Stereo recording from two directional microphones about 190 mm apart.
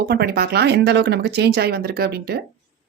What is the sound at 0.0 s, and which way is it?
Speech, 55° right (ahead or behind).